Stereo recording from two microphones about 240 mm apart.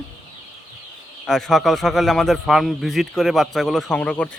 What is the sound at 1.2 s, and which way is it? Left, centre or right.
A man's voice, centre.